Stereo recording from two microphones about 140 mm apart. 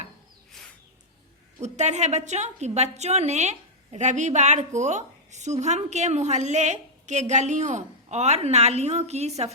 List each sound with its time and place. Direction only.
1.6 s a woman's voice: 55° right (ahead or behind)